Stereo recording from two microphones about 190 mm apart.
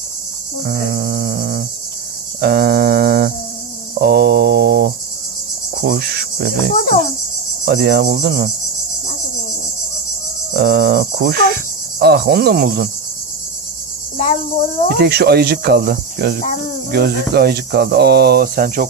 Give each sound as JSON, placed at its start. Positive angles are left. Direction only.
{"t": 0.7, "sound": "insect", "side_deg": -50}
{"t": 2.4, "sound": "music", "side_deg": -50}
{"t": 5.8, "sound": "cricket", "side_deg": -50}
{"t": 6.7, "sound": "cricket", "side_deg": 45}
{"t": 7.6, "sound": "speech", "side_deg": -60}
{"t": 10.5, "sound": "speech", "side_deg": -55}
{"t": 14.1, "sound": "cricket", "side_deg": 45}
{"t": 14.9, "sound": "speech", "side_deg": -55}